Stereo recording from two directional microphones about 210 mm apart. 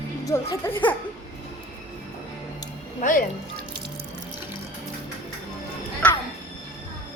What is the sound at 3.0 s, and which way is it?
Speech, 40° left (ahead or behind).